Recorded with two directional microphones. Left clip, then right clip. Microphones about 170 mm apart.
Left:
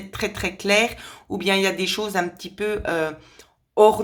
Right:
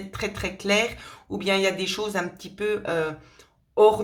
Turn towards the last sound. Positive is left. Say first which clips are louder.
# left 2 dB
turn(degrees=30)  # may be behind; listen again after turning